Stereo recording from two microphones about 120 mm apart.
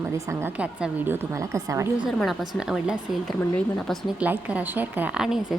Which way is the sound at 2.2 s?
Centre (ahead or behind).